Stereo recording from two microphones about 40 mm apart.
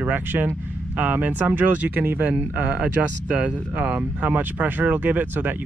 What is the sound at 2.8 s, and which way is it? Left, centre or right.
Speech, right.